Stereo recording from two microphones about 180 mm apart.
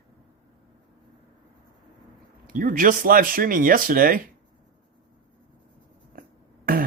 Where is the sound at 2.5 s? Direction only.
50° right (ahead or behind).